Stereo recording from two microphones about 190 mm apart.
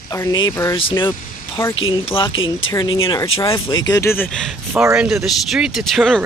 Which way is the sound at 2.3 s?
90° left.